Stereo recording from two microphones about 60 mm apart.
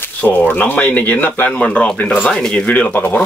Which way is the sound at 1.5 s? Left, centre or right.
Centre.